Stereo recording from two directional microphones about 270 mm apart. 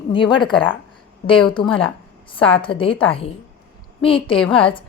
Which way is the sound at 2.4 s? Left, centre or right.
Centre.